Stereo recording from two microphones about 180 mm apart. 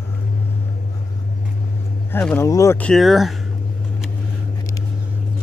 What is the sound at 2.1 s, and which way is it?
Speech, 10° left (ahead or behind).